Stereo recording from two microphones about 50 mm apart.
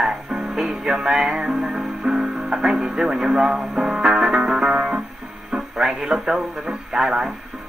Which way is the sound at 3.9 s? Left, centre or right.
Centre.